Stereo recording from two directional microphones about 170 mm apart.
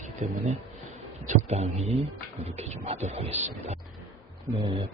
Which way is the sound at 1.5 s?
40° right (ahead or behind).